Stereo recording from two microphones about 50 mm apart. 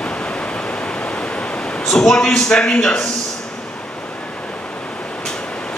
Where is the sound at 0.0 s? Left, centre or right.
Centre.